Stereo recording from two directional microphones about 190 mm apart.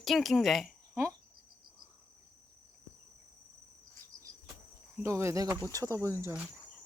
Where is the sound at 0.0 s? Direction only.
Centre (ahead or behind).